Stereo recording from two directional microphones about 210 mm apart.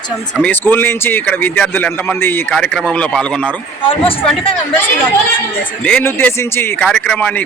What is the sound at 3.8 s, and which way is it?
Speech, 25° left (ahead or behind).